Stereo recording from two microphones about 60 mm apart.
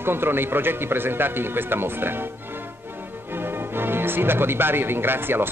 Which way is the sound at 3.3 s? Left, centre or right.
Right.